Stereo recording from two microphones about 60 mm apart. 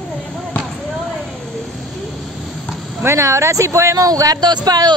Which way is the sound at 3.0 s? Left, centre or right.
Right.